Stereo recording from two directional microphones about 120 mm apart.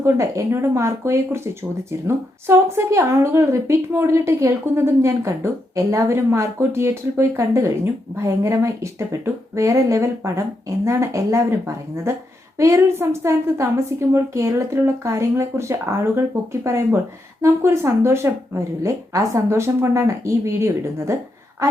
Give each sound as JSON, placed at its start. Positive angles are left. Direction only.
{"t": 0.0, "sound": "a woman's voice", "side_deg": -25}